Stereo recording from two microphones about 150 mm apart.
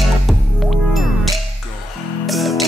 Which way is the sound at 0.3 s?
Centre (ahead or behind).